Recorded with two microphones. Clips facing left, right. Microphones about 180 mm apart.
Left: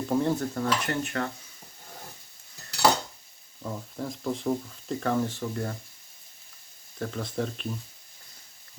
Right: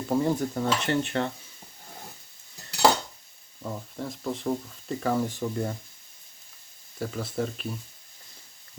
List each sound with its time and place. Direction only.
0.1 s stir: 10° right (ahead or behind)
0.7 s dishes: 25° right (ahead or behind)
3.6 s speech: centre (ahead or behind)
7.0 s speech: 5° right (ahead or behind)